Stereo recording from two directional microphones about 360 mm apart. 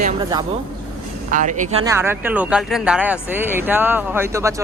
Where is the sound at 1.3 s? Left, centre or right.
Right.